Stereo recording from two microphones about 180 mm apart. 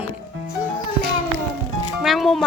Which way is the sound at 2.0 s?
Centre (ahead or behind).